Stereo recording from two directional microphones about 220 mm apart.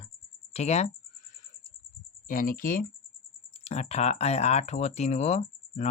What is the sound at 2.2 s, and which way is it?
Speech, 40° left (ahead or behind).